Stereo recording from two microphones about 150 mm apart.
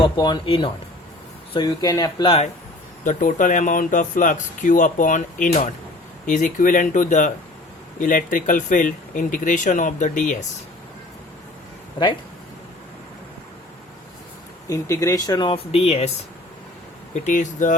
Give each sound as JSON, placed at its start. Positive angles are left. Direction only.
{"t": 0.0, "sound": "speech", "side_deg": 30}
{"t": 3.0, "sound": "speech", "side_deg": 60}
{"t": 14.7, "sound": "speech", "side_deg": 20}
{"t": 17.2, "sound": "speech", "side_deg": 55}